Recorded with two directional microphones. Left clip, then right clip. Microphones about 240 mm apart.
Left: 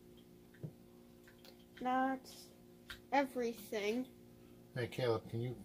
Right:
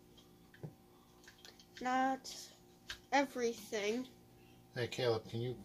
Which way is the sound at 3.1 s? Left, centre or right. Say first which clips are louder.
Right 1 dB; centre.